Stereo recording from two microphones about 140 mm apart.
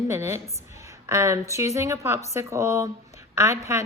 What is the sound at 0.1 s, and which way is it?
A woman's voice, 15° right (ahead or behind).